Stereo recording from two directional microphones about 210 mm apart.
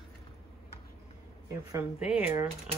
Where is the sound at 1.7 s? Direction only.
10° right (ahead or behind).